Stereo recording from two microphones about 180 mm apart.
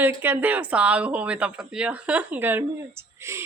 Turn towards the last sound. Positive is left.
turn(degrees=-15)  # may be behind; listen again after turning